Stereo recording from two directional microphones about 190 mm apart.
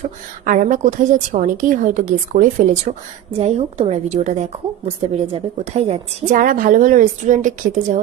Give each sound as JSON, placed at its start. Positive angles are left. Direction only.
{"t": 0.4, "sound": "a woman's voice", "side_deg": -40}